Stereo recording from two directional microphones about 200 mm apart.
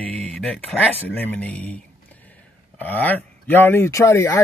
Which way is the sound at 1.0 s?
10° left (ahead or behind).